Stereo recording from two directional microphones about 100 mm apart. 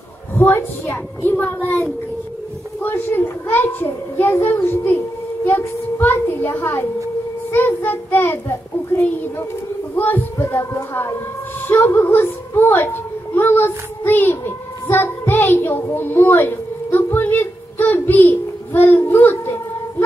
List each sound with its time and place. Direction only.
0.3 s a child's voice: 25° left (ahead or behind)